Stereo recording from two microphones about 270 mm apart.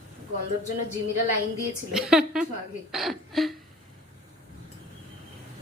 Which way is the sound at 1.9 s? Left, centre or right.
Centre.